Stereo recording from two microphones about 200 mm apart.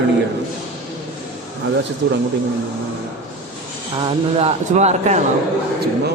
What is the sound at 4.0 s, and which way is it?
A woman's voice, 25° right (ahead or behind).